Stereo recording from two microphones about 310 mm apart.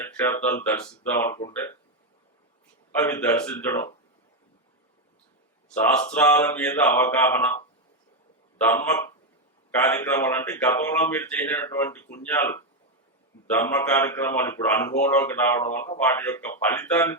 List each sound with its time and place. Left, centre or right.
0.0 s speech: centre
3.0 s speech: centre
5.8 s speech: centre
8.7 s speech: centre